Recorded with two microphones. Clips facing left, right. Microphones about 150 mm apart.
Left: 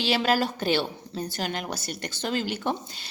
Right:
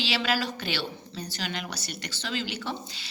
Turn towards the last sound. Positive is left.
turn(degrees=50)  # may be behind; listen again after turning